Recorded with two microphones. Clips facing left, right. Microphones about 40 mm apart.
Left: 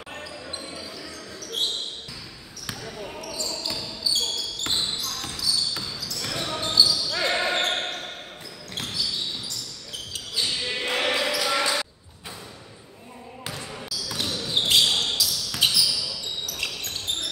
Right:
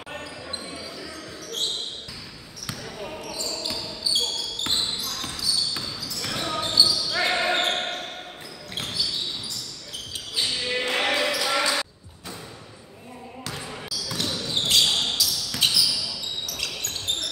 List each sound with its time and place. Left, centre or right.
2.8 s basketball bounce: centre
3.2 s basketball bounce: right
3.4 s basketball bounce: centre
10.4 s basketball bounce: centre
13.6 s basketball bounce: centre
14.2 s basketball bounce: centre
16.4 s basketball bounce: centre